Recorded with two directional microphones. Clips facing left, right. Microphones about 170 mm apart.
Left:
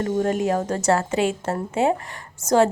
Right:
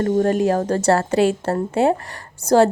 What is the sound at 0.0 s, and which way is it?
Speech, 40° right (ahead or behind).